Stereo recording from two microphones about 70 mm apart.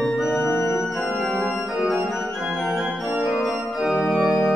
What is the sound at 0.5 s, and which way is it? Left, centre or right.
Organ, left.